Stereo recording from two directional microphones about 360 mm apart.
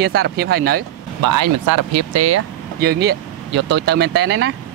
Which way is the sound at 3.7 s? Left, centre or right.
Right.